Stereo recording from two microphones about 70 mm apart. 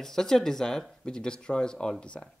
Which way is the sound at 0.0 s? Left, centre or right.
Centre.